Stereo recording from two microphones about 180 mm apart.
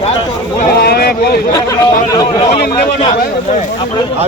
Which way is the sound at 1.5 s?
20° left (ahead or behind).